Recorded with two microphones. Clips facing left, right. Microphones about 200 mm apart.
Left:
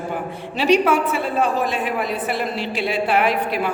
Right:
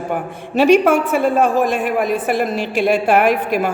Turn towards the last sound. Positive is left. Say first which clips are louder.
# right 4 dB
turn(degrees=-45)  # may be behind; listen again after turning